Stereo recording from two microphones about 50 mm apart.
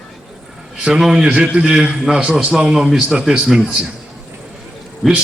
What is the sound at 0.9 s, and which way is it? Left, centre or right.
A man's voice, centre.